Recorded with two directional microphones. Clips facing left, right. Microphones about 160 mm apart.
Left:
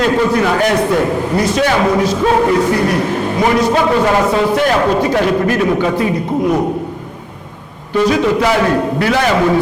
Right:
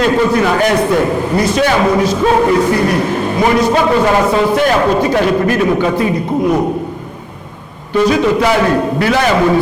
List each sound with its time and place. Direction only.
0.0 s a man's voice: 15° right (ahead or behind)
7.9 s a man's voice: 15° right (ahead or behind)